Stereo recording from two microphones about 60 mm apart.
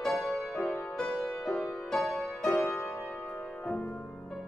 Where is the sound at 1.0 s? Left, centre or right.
Centre.